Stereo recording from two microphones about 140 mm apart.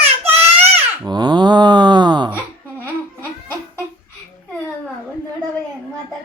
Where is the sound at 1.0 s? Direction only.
30° right (ahead or behind).